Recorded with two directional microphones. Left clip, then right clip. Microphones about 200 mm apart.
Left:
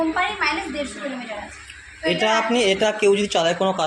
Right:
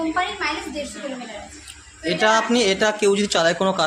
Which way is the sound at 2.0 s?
10° right (ahead or behind).